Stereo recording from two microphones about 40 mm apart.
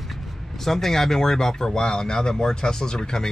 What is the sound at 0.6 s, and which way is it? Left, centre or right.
Speech, centre.